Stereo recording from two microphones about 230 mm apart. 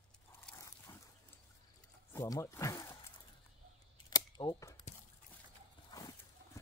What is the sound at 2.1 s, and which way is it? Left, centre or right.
Speech, centre.